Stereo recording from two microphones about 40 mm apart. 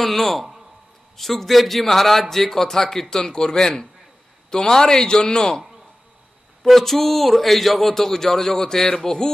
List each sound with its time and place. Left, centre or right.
0.0 s a man's voice: centre
6.6 s a man's voice: centre